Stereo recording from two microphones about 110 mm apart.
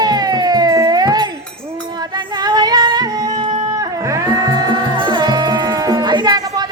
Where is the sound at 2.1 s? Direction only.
40° right (ahead or behind).